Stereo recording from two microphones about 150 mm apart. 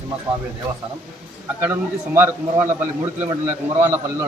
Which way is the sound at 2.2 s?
15° right (ahead or behind).